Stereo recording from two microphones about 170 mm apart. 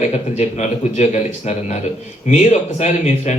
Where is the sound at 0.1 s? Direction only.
45° left (ahead or behind).